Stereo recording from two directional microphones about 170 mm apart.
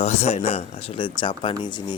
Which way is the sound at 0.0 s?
35° left (ahead or behind).